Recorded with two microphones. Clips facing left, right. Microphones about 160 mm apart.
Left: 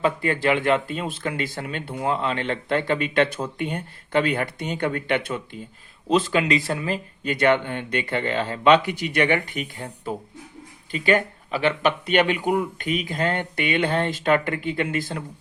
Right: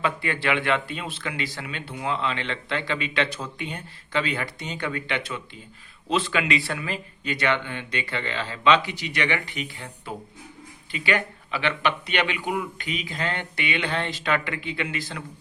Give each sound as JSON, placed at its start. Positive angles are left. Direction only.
{"t": 0.0, "sound": "speech", "side_deg": 40}